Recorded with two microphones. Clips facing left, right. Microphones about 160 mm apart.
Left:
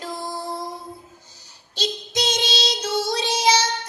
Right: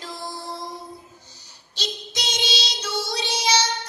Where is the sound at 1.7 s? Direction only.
50° left (ahead or behind).